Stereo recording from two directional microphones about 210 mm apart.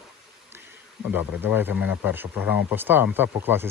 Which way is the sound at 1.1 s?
10° right (ahead or behind).